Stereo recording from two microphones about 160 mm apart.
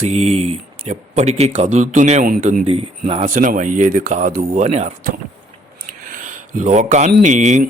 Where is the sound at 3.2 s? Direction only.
55° right (ahead or behind).